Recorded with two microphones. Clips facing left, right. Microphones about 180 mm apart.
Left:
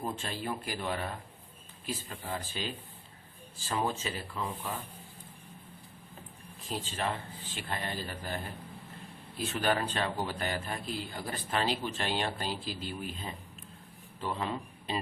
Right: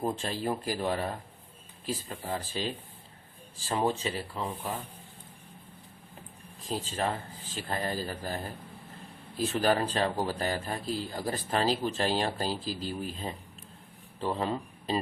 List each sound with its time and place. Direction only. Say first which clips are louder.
0.0 s speech: right 5 dB; 35° right (ahead or behind)
6.6 s a man's voice: right 3 dB; 40° right (ahead or behind)